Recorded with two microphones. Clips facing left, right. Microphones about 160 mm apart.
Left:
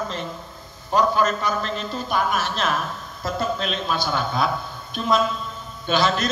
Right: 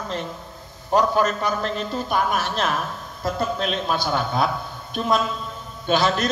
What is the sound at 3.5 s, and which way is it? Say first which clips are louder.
A man's voice: right 1 dB; 50° right (ahead or behind).